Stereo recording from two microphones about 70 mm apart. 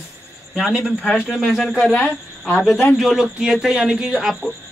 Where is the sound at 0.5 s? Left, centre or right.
Centre.